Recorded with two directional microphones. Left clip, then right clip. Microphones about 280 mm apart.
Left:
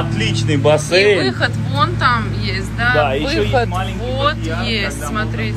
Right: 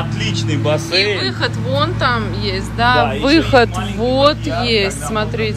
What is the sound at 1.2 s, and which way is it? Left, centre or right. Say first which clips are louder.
Speech: left 2 dB; centre.